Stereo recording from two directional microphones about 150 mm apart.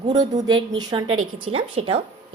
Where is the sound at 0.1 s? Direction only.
30° right (ahead or behind).